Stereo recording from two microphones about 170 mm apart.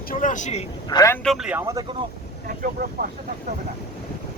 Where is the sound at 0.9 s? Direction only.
20° left (ahead or behind).